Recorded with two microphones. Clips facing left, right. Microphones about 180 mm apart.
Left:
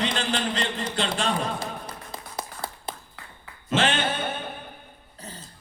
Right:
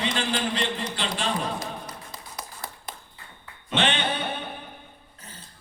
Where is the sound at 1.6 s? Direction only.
25° left (ahead or behind).